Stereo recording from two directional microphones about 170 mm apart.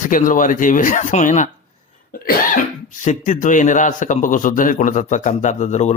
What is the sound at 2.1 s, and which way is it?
Speech, 55° left (ahead or behind).